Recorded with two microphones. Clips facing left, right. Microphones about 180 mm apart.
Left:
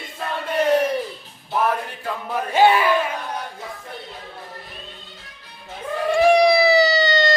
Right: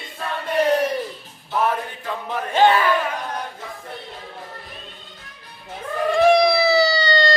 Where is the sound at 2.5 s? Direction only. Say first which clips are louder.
Even; 10° left (ahead or behind).